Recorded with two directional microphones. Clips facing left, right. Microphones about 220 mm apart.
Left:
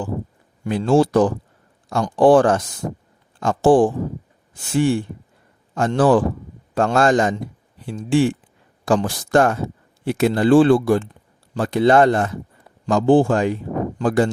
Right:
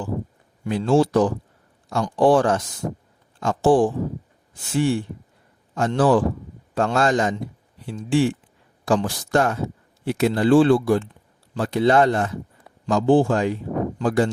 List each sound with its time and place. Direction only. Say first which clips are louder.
0.6 s speech: left 2 dB; 50° left (ahead or behind)